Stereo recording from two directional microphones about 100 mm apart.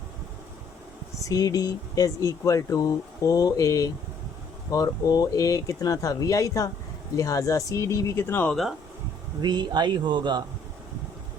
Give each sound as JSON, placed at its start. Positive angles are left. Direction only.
{"t": 1.2, "sound": "speech", "side_deg": 35}
{"t": 9.4, "sound": "speech", "side_deg": -45}